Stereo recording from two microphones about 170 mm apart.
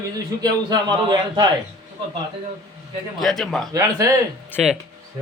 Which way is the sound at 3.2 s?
Centre (ahead or behind).